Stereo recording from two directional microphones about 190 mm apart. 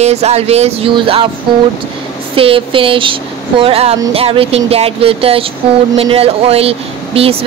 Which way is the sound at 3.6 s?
30° right (ahead or behind).